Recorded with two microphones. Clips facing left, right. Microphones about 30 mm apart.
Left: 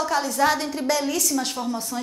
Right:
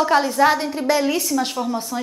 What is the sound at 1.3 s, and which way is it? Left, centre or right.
Speech, centre.